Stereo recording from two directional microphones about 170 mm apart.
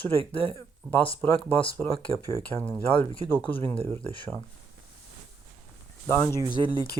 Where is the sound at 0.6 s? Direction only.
10° left (ahead or behind).